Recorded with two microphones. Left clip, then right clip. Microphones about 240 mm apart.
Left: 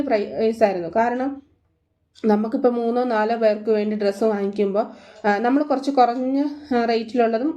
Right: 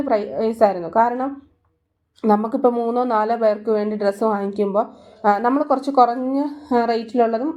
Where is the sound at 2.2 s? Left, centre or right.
Centre.